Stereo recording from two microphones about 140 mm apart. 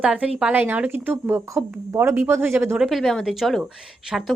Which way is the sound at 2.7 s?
5° right (ahead or behind).